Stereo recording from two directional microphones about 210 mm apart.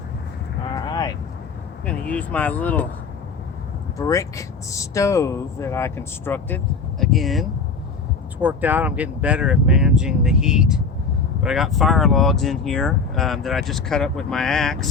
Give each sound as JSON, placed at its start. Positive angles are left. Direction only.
{"t": 0.8, "sound": "vehicle", "side_deg": 20}
{"t": 1.8, "sound": "speech", "side_deg": 5}
{"t": 3.9, "sound": "speech", "side_deg": 15}